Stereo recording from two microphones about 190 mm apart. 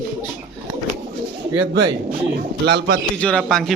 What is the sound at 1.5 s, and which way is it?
Speech, 70° right (ahead or behind).